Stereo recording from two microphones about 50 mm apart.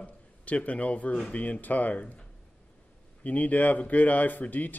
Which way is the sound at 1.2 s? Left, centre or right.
Left.